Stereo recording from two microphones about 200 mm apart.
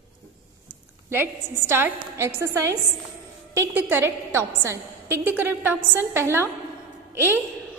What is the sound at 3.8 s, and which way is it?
A woman's voice, 10° right (ahead or behind).